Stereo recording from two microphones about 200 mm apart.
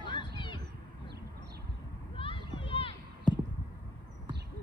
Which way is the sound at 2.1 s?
25° left (ahead or behind).